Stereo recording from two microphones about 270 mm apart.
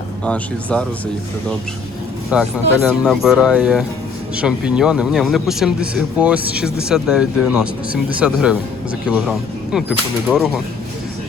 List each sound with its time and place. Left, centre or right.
0.3 s speech: centre
2.3 s speech: centre